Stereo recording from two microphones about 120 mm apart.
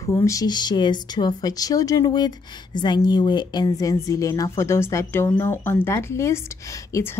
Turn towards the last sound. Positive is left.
turn(degrees=25)  # may be behind; listen again after turning